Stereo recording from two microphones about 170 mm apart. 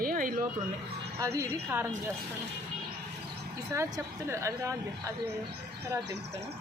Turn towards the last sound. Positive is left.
turn(degrees=-20)  # may be behind; listen again after turning